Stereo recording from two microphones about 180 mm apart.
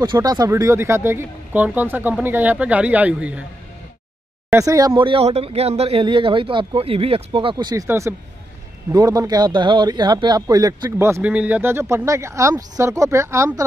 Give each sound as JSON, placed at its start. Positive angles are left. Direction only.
{"t": 0.0, "sound": "speech", "side_deg": -25}
{"t": 4.5, "sound": "speech", "side_deg": -15}